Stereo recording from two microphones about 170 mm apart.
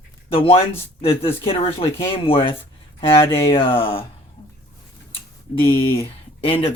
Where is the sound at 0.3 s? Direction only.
35° left (ahead or behind).